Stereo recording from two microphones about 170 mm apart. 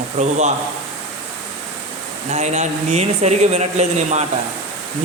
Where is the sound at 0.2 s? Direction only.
45° right (ahead or behind).